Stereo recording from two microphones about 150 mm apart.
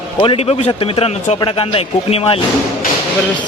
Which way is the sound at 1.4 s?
35° left (ahead or behind).